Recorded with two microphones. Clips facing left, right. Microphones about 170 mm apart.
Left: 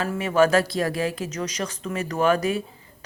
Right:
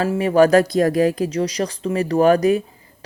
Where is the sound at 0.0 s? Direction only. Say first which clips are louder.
Right 5 dB; 35° right (ahead or behind).